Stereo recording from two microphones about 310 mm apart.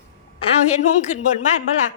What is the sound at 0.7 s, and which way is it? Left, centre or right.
Speech, left.